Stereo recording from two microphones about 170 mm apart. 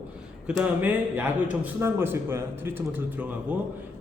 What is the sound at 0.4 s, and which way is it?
A man's voice, 5° right (ahead or behind).